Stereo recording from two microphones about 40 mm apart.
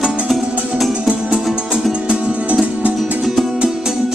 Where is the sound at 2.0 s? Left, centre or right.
Right.